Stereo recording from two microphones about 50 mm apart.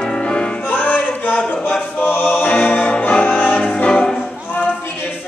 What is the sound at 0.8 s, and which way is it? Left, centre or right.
Music, left.